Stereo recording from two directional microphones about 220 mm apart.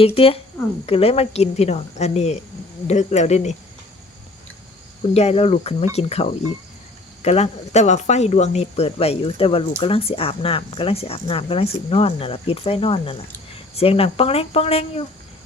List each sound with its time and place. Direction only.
0.0 s speech: 25° left (ahead or behind)
5.1 s speech: 30° left (ahead or behind)